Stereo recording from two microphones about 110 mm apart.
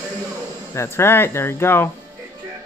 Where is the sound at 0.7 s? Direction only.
25° left (ahead or behind).